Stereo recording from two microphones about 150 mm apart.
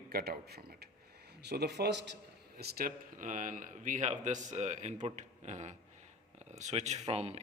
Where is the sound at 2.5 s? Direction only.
75° right (ahead or behind).